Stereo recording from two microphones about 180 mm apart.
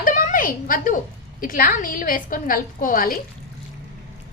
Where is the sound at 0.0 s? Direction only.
50° left (ahead or behind).